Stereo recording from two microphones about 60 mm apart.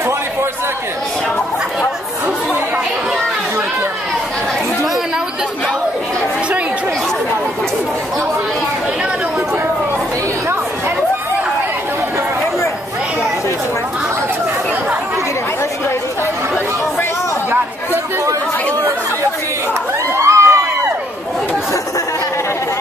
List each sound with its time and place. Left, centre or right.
20.2 s crowd: right